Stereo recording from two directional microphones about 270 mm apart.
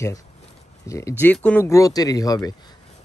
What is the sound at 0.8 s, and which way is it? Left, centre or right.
Speech, centre.